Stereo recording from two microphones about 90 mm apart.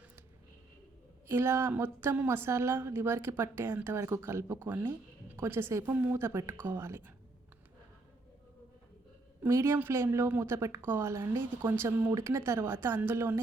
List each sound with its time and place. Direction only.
1.3 s a woman's voice: 25° right (ahead or behind)
9.5 s a woman's voice: 30° right (ahead or behind)